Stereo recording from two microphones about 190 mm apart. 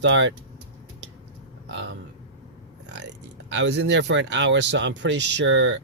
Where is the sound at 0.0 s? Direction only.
75° right (ahead or behind).